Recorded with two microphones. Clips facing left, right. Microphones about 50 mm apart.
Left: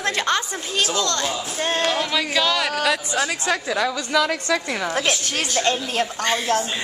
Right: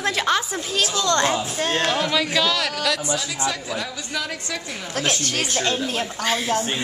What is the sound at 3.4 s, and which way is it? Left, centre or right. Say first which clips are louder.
A woman's voice: left 5 dB; left.